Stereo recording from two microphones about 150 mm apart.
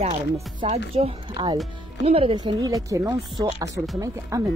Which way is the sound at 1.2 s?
30° right (ahead or behind).